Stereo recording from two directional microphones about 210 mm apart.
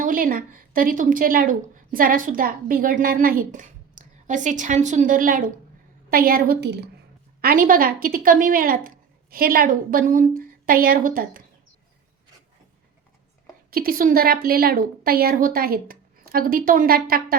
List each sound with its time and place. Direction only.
0.0 s a woman's voice: 40° right (ahead or behind)
13.7 s a woman's voice: 45° right (ahead or behind)